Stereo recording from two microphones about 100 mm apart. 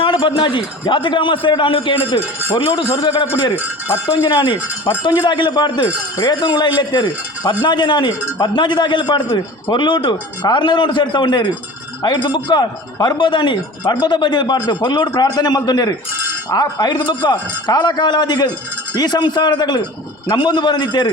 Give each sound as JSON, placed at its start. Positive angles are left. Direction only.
{"t": 0.0, "sound": "a man's voice", "side_deg": 55}